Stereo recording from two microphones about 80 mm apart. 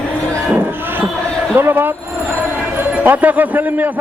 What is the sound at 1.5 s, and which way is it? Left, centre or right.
Speech, right.